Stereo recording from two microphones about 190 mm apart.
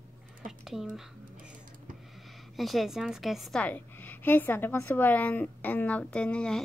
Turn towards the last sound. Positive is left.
turn(degrees=5)  # may be behind; listen again after turning